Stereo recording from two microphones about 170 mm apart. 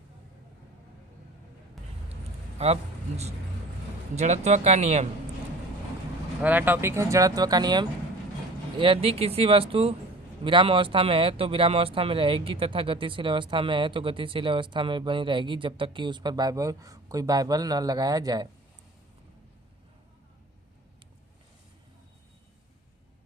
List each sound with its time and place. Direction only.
2.6 s speech: 35° right (ahead or behind)
4.1 s speech: 40° right (ahead or behind)
6.4 s speech: 10° right (ahead or behind)